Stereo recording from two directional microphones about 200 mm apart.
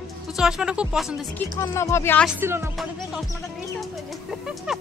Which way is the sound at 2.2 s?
10° right (ahead or behind).